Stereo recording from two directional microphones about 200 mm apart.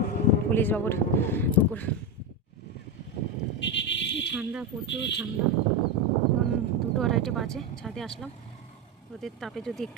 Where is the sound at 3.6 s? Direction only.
60° left (ahead or behind).